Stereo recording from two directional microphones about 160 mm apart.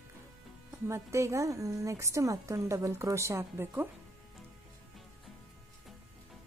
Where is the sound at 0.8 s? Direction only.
15° right (ahead or behind).